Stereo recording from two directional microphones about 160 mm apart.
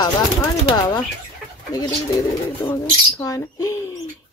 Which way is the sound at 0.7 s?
25° left (ahead or behind).